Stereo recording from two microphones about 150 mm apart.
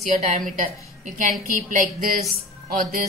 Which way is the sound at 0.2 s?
60° right (ahead or behind).